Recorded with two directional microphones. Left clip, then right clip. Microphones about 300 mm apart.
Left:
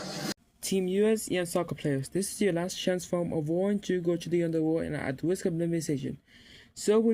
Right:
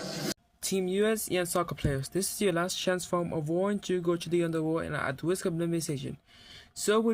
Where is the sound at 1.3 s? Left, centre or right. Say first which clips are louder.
Even; right.